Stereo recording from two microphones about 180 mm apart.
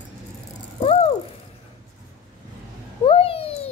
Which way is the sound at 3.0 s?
30° left (ahead or behind).